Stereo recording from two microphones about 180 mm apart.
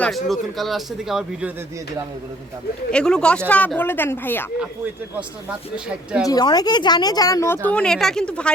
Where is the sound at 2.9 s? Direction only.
5° left (ahead or behind).